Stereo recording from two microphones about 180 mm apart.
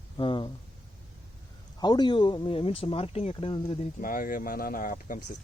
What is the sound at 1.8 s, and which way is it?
Speech, 25° left (ahead or behind).